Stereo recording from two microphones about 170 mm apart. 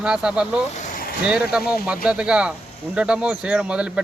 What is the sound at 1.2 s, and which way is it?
Speech, 5° right (ahead or behind).